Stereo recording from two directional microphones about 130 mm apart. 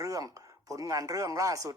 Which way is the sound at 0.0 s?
25° right (ahead or behind).